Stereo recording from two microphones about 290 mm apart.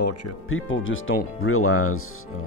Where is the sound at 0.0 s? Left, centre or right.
Left.